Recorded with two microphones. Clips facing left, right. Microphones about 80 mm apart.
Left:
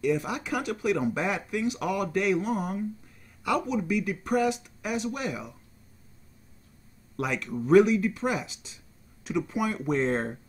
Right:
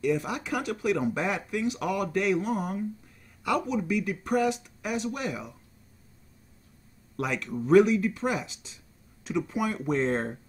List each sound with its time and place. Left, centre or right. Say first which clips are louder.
0.0 s speech: even; centre
7.2 s speech: even; centre